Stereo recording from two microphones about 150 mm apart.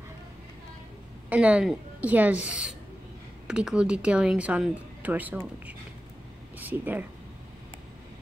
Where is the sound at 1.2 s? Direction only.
10° right (ahead or behind).